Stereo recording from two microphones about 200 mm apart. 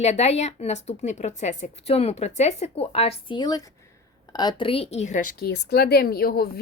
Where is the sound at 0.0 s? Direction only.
35° left (ahead or behind).